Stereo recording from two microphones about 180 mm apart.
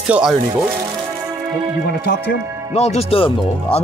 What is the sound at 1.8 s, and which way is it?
Speech, 60° left (ahead or behind).